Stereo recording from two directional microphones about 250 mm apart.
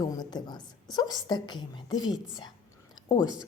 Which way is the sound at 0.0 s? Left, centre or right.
Centre.